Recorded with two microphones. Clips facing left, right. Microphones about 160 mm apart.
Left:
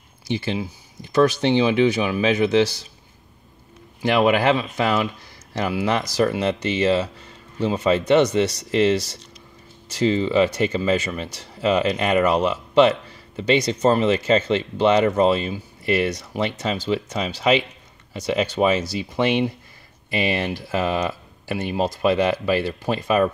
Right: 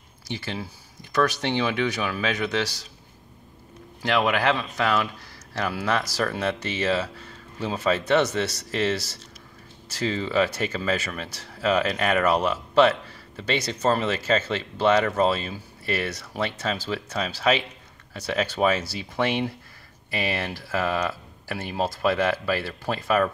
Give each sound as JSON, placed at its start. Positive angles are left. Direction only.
{"t": 0.3, "sound": "speech", "side_deg": 25}
{"t": 4.1, "sound": "a man's voice", "side_deg": 25}
{"t": 13.4, "sound": "speech", "side_deg": 20}